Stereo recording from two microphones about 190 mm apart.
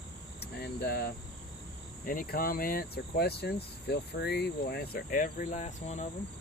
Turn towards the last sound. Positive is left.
turn(degrees=40)  # may be behind; listen again after turning